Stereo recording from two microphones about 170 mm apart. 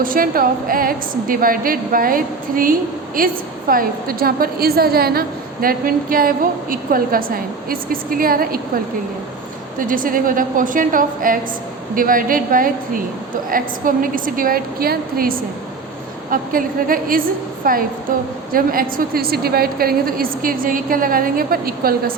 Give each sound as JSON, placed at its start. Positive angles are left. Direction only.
{"t": 0.0, "sound": "a woman's voice", "side_deg": -55}